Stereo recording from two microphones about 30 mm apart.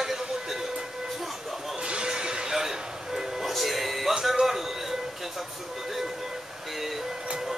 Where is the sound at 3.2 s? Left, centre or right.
Centre.